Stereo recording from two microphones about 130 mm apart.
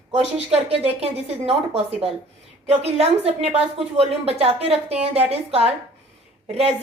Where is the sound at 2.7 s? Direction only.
50° right (ahead or behind).